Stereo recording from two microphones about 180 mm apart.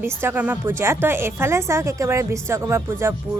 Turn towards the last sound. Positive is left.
turn(degrees=-15)  # may be behind; listen again after turning